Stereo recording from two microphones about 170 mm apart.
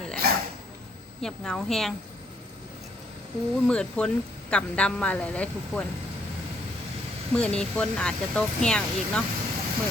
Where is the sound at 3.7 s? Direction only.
5° left (ahead or behind).